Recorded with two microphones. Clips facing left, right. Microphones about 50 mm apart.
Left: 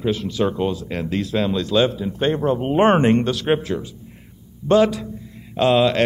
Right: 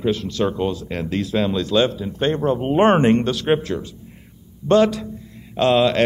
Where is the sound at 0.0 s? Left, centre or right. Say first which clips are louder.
Even; centre.